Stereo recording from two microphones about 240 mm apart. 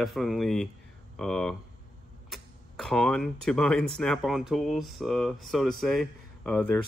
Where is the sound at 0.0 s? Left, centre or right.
Centre.